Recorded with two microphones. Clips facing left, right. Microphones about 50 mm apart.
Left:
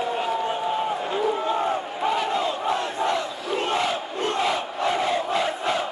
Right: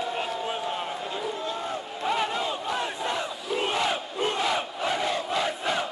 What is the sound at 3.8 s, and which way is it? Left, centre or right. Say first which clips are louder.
Crowd: left 2 dB; centre.